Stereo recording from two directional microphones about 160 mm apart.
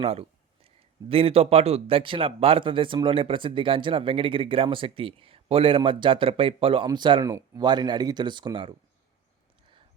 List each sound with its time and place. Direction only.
0.0 s a man's voice: 40° right (ahead or behind)